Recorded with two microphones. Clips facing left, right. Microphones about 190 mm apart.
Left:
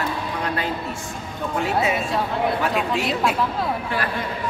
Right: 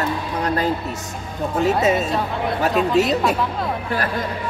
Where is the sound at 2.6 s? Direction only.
40° right (ahead or behind).